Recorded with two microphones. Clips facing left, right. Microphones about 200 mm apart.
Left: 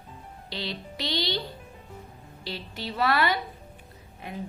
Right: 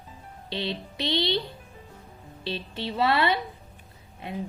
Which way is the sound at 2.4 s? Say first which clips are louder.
Right 4 dB; 25° right (ahead or behind).